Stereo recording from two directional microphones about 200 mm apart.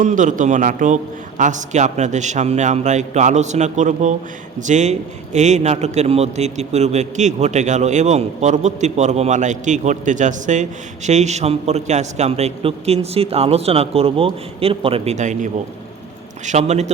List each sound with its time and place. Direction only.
0.0 s a man's voice: 40° right (ahead or behind)